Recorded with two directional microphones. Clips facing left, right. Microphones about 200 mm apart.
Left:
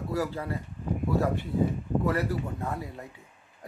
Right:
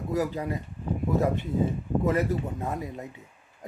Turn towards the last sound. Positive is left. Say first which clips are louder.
# right 2 dB
turn(degrees=-20)  # may be behind; listen again after turning